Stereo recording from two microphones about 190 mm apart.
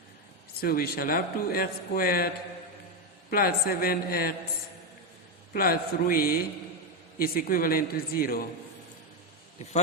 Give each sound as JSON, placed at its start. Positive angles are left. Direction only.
{"t": 0.6, "sound": "a man's voice", "side_deg": 50}
{"t": 5.5, "sound": "a man's voice", "side_deg": 50}